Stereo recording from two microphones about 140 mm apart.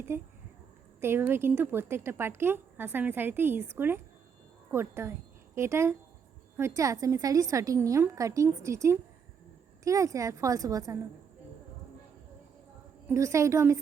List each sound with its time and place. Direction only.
1.0 s a woman's voice: 15° right (ahead or behind)
13.1 s a woman's voice: 20° right (ahead or behind)